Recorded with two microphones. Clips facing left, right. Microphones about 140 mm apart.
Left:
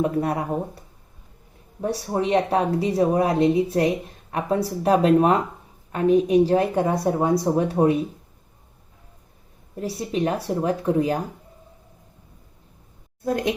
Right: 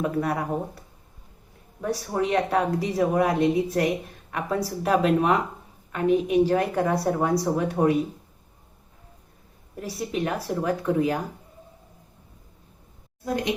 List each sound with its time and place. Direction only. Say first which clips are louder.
0.0 s speech: left 3 dB; 30° left (ahead or behind)
1.8 s speech: left 2 dB; 30° left (ahead or behind)
9.8 s speech: left 4 dB; 30° left (ahead or behind)
13.2 s speech: left 4 dB; 55° left (ahead or behind)